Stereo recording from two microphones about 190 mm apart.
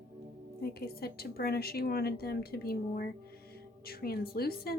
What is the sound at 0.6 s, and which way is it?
A woman's voice, 55° left (ahead or behind).